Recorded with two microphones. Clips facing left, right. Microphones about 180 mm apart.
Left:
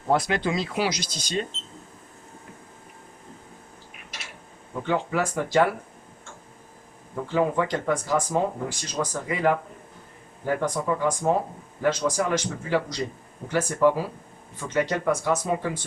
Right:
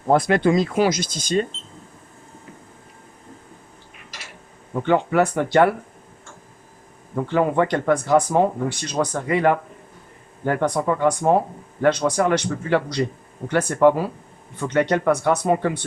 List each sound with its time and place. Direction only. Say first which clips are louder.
0.1 s speech: right 7 dB; 55° right (ahead or behind)
4.9 s speech: right 7 dB; 60° right (ahead or behind)
7.3 s speech: right 4 dB; 65° right (ahead or behind)